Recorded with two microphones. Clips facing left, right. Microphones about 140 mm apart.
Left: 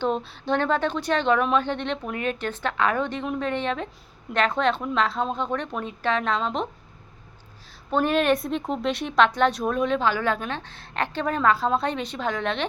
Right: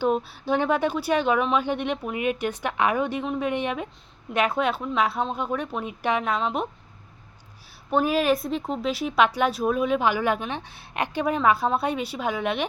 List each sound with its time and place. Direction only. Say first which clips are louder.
0.0 s speech: right 2 dB; 10° right (ahead or behind)
7.9 s a woman's voice: even; 10° right (ahead or behind)